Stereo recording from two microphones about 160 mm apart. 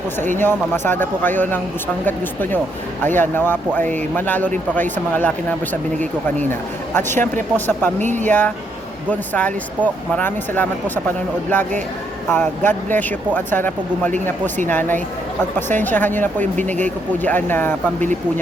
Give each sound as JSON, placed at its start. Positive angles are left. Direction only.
{"t": 0.3, "sound": "speech", "side_deg": 15}
{"t": 7.9, "sound": "speech", "side_deg": -50}
{"t": 8.3, "sound": "speech", "side_deg": 10}
{"t": 16.4, "sound": "speech", "side_deg": -50}
{"t": 16.8, "sound": "speech", "side_deg": 10}